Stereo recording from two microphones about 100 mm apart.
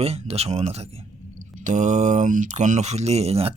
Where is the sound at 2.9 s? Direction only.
90° right.